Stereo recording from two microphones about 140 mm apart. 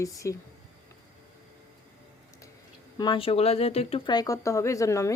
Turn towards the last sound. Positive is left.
turn(degrees=20)  # may be behind; listen again after turning